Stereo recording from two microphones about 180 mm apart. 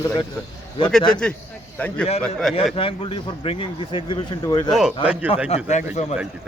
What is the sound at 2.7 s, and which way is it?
A man's voice, 30° left (ahead or behind).